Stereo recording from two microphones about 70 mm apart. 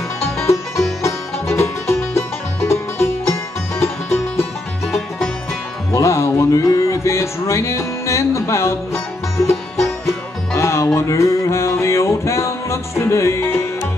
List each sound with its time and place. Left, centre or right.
0.4 s music: left
4.9 s music: centre
5.9 s music: left